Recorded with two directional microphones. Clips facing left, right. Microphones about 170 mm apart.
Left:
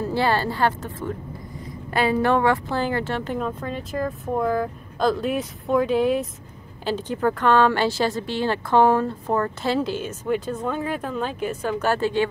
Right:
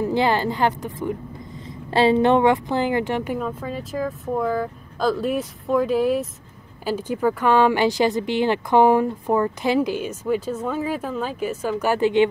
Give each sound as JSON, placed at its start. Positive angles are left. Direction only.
{"t": 0.0, "sound": "speech", "side_deg": -15}
{"t": 1.9, "sound": "a woman's voice", "side_deg": -25}